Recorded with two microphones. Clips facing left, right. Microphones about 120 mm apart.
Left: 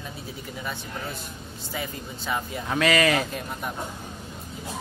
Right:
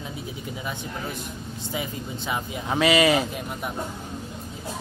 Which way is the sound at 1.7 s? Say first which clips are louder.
Right 2 dB; 15° right (ahead or behind).